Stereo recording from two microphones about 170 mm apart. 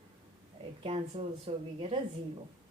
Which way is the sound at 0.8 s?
35° right (ahead or behind).